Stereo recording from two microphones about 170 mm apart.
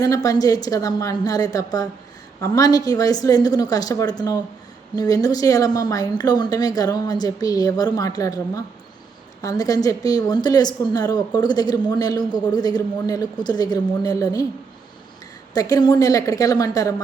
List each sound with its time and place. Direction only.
0.0 s a woman's voice: 20° left (ahead or behind)
15.5 s a woman's voice: 20° left (ahead or behind)